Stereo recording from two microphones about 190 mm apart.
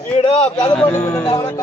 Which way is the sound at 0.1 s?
30° left (ahead or behind).